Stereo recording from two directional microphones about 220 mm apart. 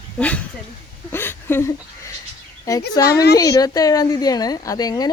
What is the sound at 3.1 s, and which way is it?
Speech, 45° left (ahead or behind).